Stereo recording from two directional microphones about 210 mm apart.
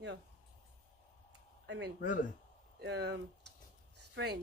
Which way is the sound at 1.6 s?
60° right (ahead or behind).